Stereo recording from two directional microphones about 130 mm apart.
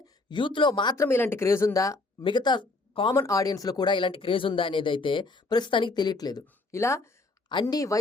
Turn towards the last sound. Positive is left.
turn(degrees=25)  # may be behind; listen again after turning